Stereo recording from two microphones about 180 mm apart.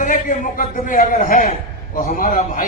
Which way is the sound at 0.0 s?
50° left (ahead or behind).